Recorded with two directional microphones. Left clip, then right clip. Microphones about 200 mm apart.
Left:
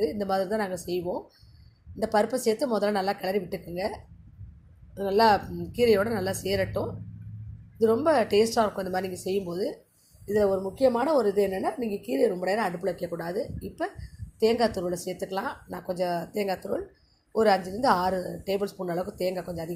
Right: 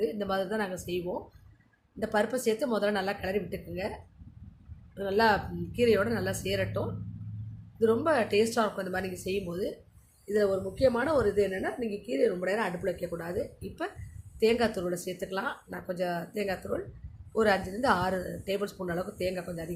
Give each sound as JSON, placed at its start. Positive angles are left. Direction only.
{"t": 0.0, "sound": "a woman's voice", "side_deg": 15}
{"t": 7.8, "sound": "a woman's voice", "side_deg": 15}